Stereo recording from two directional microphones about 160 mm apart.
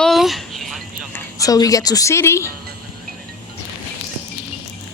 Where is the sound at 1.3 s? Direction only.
20° left (ahead or behind).